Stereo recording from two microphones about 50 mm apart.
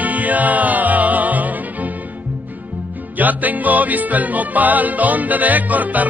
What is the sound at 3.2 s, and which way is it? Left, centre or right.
Music, right.